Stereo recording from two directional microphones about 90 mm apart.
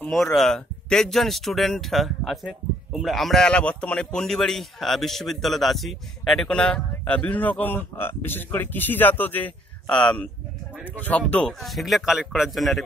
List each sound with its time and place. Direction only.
0.1 s a man's voice: centre (ahead or behind)
11.4 s speech: centre (ahead or behind)